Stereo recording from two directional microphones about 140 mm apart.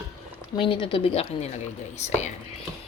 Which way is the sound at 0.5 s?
35° left (ahead or behind).